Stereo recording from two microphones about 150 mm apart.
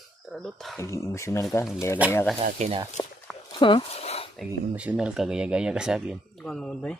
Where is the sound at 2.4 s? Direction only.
45° right (ahead or behind).